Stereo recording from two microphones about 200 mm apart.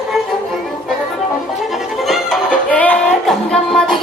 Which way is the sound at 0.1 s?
Centre (ahead or behind).